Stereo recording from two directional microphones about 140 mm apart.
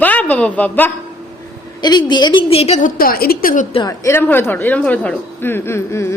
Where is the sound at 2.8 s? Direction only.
80° left.